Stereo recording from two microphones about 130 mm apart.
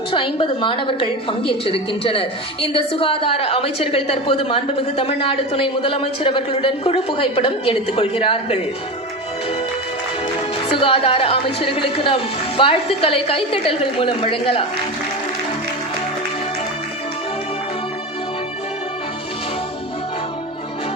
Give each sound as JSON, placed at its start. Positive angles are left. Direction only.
{"t": 0.1, "sound": "a woman's voice", "side_deg": 40}
{"t": 10.7, "sound": "a woman's voice", "side_deg": 45}